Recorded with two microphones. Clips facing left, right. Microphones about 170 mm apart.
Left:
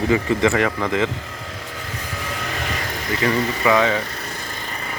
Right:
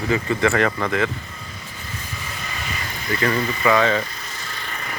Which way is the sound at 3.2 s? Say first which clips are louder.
Left 1 dB; 15° left (ahead or behind).